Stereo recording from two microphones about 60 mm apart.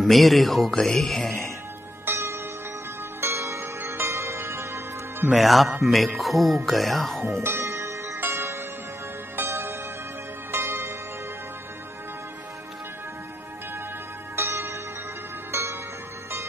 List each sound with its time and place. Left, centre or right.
0.0 s speech: centre
2.0 s music: right
5.3 s speech: centre
7.3 s speech: right
7.6 s music: right
14.3 s music: right